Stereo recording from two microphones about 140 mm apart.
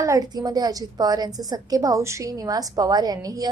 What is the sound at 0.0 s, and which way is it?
A woman's voice, 25° right (ahead or behind).